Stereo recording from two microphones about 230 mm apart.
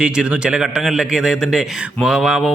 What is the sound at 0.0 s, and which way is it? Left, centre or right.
A man's voice, centre.